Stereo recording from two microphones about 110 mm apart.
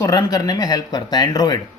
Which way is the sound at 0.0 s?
35° left (ahead or behind).